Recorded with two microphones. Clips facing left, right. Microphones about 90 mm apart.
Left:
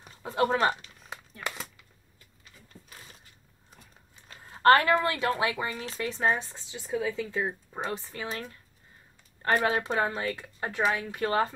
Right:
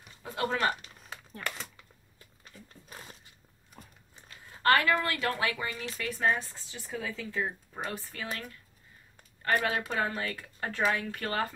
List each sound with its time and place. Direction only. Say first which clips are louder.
0.0 s speech: left 6 dB; 25° left (ahead or behind)
1.4 s a sound: left 1 dB; 10° left (ahead or behind)
4.3 s a woman's voice: left 5 dB; 35° left (ahead or behind)